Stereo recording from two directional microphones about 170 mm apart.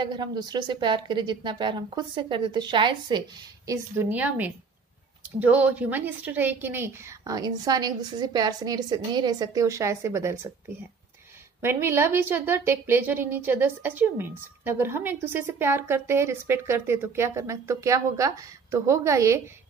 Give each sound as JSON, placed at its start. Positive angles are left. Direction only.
{"t": 0.0, "sound": "a woman's voice", "side_deg": -25}
{"t": 11.6, "sound": "a woman's voice", "side_deg": -15}